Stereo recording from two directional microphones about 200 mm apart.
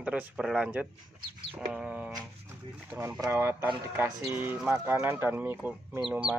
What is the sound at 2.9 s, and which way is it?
Speech, 10° right (ahead or behind).